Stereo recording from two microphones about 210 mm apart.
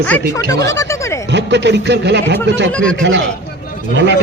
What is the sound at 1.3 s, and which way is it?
A man's voice, 55° right (ahead or behind).